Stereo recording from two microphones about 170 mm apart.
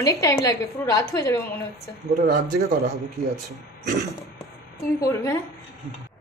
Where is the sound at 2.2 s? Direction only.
55° right (ahead or behind).